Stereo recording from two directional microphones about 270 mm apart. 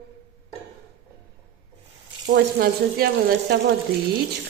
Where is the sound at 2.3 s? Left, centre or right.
Right.